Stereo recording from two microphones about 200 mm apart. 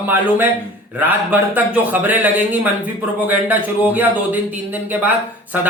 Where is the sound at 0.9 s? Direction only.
10° right (ahead or behind).